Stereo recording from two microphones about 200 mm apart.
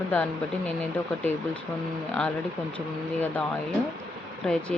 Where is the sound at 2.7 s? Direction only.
5° left (ahead or behind).